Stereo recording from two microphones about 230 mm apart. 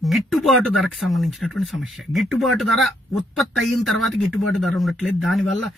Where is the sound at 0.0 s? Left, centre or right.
Centre.